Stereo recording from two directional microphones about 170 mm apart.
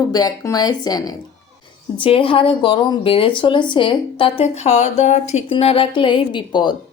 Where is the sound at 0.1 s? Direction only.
25° left (ahead or behind).